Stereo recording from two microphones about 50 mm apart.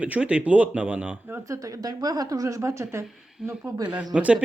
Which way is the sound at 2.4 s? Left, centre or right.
Right.